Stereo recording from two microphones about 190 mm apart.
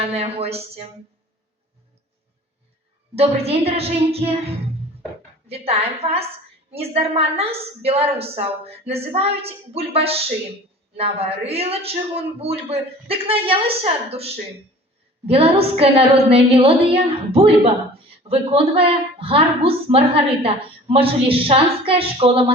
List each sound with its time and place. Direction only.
0.1 s a woman's voice: 30° right (ahead or behind)
3.2 s a woman's voice: 30° right (ahead or behind)
5.5 s a woman's voice: 30° right (ahead or behind)